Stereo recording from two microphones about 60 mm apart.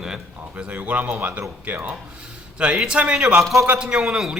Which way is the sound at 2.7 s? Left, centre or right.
Centre.